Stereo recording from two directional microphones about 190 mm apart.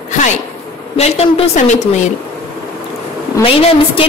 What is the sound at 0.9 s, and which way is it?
Speech, 35° left (ahead or behind).